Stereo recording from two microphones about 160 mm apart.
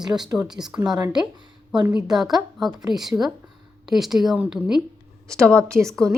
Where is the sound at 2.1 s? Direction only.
Centre (ahead or behind).